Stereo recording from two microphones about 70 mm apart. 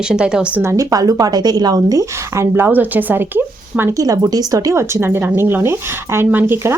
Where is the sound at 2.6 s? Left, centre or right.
Right.